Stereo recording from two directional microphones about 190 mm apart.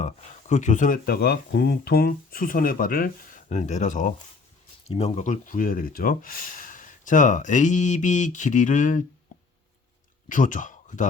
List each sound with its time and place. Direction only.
0.0 s speech: 40° left (ahead or behind)
10.2 s speech: 45° left (ahead or behind)